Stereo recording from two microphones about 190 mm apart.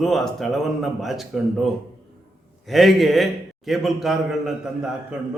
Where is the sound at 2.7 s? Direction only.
Centre (ahead or behind).